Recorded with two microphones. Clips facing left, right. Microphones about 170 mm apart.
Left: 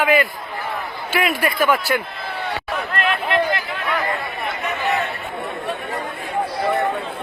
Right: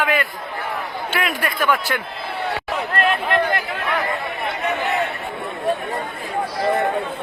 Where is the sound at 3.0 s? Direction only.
45° right (ahead or behind).